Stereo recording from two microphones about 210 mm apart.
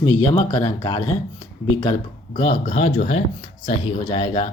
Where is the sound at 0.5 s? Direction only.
20° left (ahead or behind).